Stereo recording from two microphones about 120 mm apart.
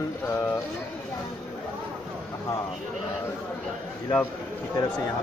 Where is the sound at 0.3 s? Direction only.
30° left (ahead or behind).